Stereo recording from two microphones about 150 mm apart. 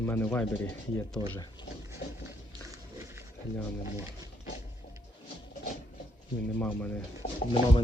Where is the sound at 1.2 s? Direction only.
25° left (ahead or behind).